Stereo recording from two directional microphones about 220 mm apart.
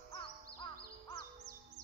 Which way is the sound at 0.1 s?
20° left (ahead or behind).